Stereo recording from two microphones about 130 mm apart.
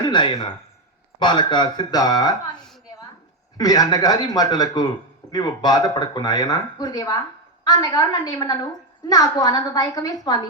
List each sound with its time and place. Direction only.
0.0 s speech: 35° left (ahead or behind)
3.6 s speech: 30° left (ahead or behind)